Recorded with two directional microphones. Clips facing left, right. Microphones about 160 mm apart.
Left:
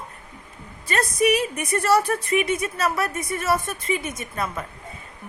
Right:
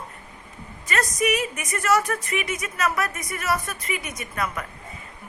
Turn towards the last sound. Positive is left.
turn(degrees=25)  # may be behind; listen again after turning